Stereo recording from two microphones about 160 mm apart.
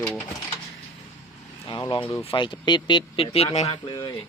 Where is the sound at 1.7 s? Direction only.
30° left (ahead or behind).